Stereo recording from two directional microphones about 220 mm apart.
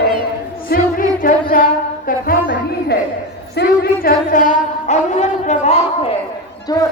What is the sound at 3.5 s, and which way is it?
A woman's voice, 45° left (ahead or behind).